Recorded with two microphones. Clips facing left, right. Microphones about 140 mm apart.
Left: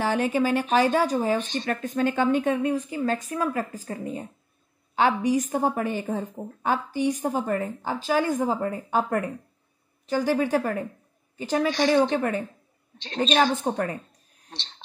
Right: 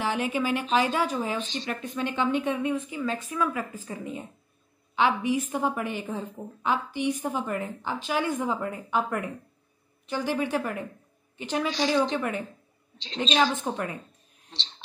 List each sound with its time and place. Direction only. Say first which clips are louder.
0.0 s a woman's voice: left 4 dB; 40° left (ahead or behind)
1.4 s a woman's voice: left 4 dB; 55° left (ahead or behind); by 11.7 s 40° left (ahead or behind)
11.7 s speech: left 4 dB; 55° left (ahead or behind)
12.2 s a woman's voice: left 4 dB; 40° left (ahead or behind)
13.0 s speech: left 3 dB; 55° left (ahead or behind)
13.7 s a woman's voice: left 4 dB; 45° left (ahead or behind)